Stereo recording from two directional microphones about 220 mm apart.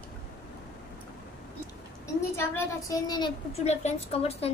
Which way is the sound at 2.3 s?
15° left (ahead or behind).